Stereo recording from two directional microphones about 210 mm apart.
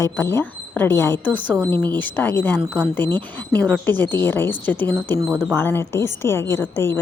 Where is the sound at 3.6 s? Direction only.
5° left (ahead or behind).